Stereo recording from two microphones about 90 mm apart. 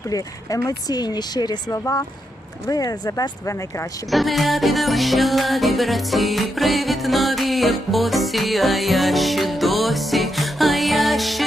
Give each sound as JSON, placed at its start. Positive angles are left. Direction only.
{"t": 0.1, "sound": "speech", "side_deg": 40}
{"t": 1.8, "sound": "speech", "side_deg": 40}
{"t": 4.1, "sound": "music", "side_deg": 0}